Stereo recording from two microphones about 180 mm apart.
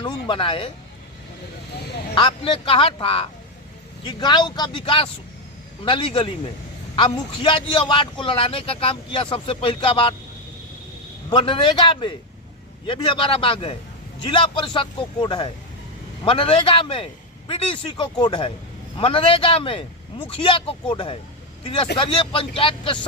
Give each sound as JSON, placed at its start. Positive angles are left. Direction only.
{"t": 0.0, "sound": "music", "side_deg": 30}
{"t": 2.1, "sound": "a man's voice", "side_deg": 30}
{"t": 11.3, "sound": "a man's voice", "side_deg": 30}